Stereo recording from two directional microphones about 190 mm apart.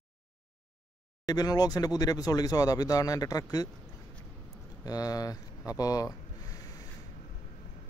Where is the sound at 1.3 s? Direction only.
20° left (ahead or behind).